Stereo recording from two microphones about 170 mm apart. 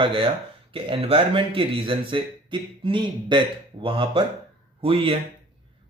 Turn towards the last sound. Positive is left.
turn(degrees=-35)  # may be behind; listen again after turning